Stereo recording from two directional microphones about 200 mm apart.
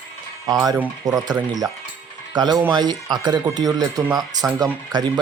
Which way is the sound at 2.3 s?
20° right (ahead or behind).